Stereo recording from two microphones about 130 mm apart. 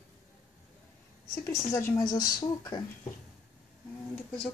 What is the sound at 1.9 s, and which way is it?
Speech, 30° left (ahead or behind).